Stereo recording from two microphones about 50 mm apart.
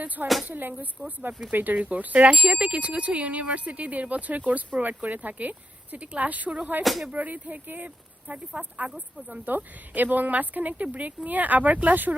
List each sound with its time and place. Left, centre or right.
0.4 s speech: right
1.3 s speech: centre
1.5 s speech: right
6.8 s speech: centre
7.1 s speech: right